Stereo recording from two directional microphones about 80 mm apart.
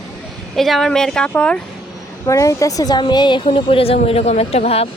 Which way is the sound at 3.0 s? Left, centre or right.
Left.